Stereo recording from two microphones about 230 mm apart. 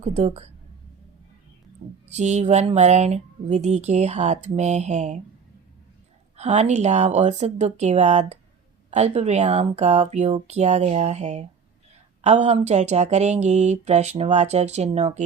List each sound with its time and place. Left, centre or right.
0.0 s speech: right
1.8 s speech: right
6.3 s speech: right